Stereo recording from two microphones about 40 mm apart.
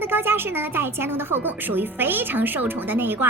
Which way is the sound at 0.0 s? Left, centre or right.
Right.